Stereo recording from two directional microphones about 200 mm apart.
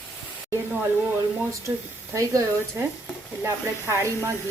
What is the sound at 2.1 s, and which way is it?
Speech, 15° right (ahead or behind).